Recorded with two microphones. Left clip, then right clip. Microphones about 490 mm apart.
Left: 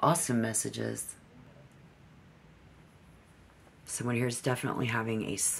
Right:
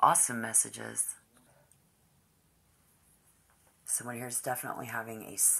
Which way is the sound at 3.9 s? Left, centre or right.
Centre.